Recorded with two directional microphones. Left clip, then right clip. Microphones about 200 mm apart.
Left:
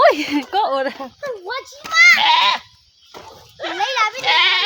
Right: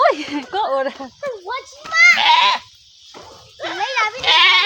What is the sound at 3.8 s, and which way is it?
Goat, 60° left (ahead or behind).